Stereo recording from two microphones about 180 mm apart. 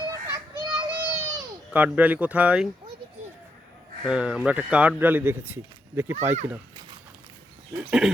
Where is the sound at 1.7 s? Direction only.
5° right (ahead or behind).